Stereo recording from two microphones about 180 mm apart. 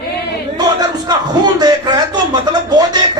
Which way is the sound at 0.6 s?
20° right (ahead or behind).